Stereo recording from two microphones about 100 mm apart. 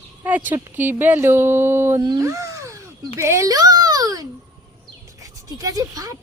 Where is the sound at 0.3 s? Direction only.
15° right (ahead or behind).